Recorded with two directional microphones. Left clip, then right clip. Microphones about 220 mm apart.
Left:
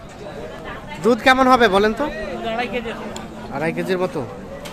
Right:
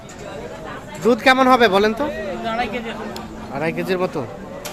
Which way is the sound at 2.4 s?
20° left (ahead or behind).